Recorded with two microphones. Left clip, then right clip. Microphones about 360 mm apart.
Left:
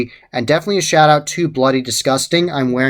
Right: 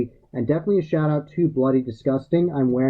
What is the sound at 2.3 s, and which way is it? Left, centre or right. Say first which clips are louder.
Speech: left 5 dB; centre.